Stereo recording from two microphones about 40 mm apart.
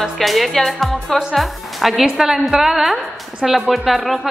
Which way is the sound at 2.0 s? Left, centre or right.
Centre.